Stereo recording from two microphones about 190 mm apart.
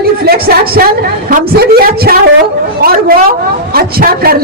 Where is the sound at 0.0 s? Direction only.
55° right (ahead or behind).